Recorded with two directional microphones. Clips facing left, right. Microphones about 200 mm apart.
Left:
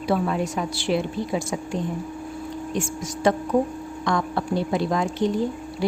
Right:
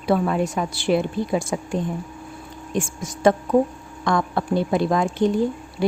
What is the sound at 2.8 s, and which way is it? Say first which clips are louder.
A woman's voice: right 4 dB; 50° right (ahead or behind).